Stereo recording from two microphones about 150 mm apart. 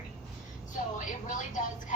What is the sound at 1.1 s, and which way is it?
Speech, 60° left (ahead or behind).